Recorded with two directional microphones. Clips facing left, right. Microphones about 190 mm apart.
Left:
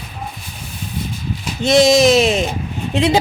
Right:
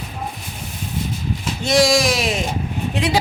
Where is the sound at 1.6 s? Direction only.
20° left (ahead or behind).